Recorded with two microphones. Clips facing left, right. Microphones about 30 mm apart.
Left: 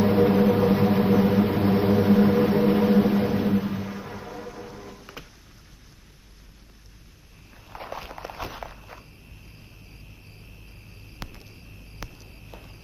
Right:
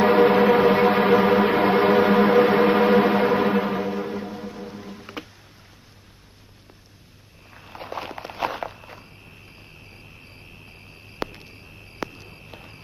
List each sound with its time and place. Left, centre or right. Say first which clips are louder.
0.0 s music: right 4 dB; right
4.2 s music: right 4 dB; centre
7.5 s walk: right 2 dB; right
7.8 s walk: right 3 dB; centre
8.0 s a sound: right 3 dB; right
8.6 s walk: right 7 dB; right
9.5 s cricket: right 4 dB; right